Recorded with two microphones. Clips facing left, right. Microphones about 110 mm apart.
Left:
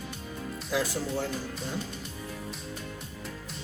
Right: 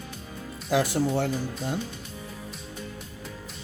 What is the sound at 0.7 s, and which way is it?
Speech, 65° right (ahead or behind).